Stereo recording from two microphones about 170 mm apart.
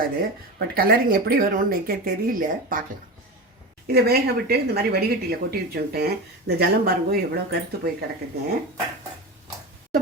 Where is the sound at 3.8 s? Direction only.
65° right (ahead or behind).